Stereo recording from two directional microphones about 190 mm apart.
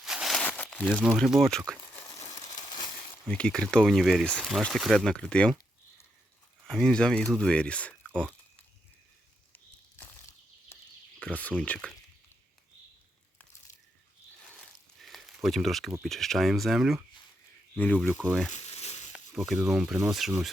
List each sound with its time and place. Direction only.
0.0 s crumpling: 5° right (ahead or behind)
0.8 s speech: 5° right (ahead or behind)
1.8 s crumpling: 20° left (ahead or behind)
2.4 s crumpling: 40° left (ahead or behind)
2.6 s crumpling: 20° left (ahead or behind)
3.2 s speech: 5° left (ahead or behind)
6.7 s speech: 5° left (ahead or behind)
11.2 s speech: 5° left (ahead or behind)
15.1 s a sound: centre (ahead or behind)
15.4 s speech: centre (ahead or behind)
18.5 s a sound: 35° left (ahead or behind)
19.1 s speech: centre (ahead or behind)